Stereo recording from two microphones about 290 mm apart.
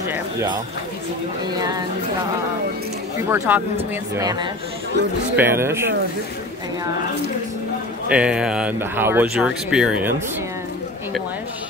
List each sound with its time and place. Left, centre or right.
0.0 s speech: centre
1.6 s speech: centre
3.3 s speech: centre
8.1 s speech: centre